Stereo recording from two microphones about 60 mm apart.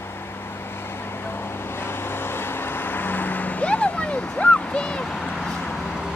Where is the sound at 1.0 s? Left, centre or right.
Left; by 5.7 s centre.